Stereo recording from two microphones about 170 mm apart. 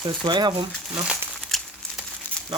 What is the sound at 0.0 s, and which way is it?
Speech, 25° right (ahead or behind).